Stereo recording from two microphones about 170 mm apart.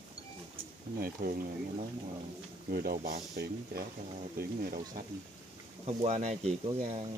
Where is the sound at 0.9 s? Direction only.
55° right (ahead or behind).